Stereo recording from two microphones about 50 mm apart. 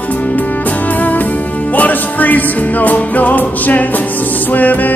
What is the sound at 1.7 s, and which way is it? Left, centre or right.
Music, left.